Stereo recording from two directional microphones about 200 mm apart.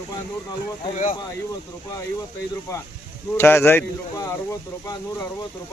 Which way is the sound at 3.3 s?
10° left (ahead or behind).